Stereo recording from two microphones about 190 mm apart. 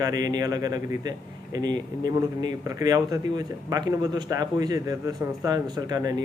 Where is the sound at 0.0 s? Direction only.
20° right (ahead or behind).